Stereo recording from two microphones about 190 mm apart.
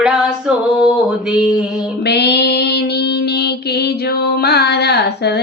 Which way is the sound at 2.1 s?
60° left (ahead or behind).